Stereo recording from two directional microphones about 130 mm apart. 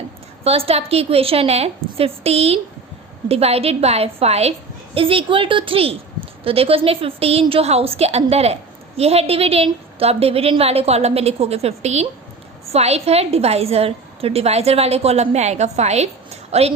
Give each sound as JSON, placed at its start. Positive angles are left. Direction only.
{"t": 0.4, "sound": "a woman's voice", "side_deg": -50}